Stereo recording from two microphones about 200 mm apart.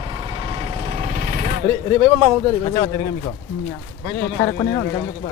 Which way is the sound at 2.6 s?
25° left (ahead or behind).